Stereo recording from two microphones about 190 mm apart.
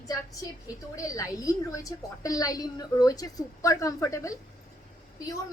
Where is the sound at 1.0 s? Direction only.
15° left (ahead or behind).